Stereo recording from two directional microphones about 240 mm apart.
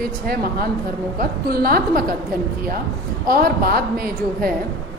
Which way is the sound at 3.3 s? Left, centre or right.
Right.